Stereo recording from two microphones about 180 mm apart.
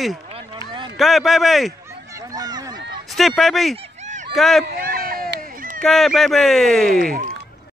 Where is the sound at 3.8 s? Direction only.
40° right (ahead or behind).